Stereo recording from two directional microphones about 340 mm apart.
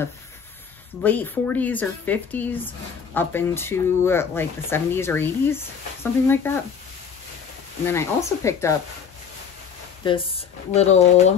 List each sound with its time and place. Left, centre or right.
1.0 s a woman's voice: centre
7.8 s speech: centre
10.0 s speech: centre